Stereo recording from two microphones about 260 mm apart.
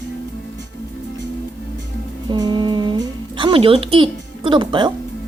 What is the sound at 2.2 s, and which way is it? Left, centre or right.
Speech, centre.